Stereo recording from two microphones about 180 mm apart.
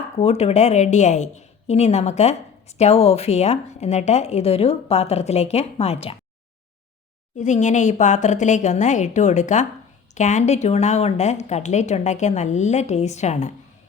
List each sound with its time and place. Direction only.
0.2 s a woman's voice: 35° left (ahead or behind)
7.3 s a woman's voice: 40° left (ahead or behind)